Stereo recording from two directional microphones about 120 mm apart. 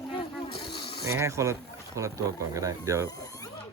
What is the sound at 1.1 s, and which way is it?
Speech, 25° right (ahead or behind).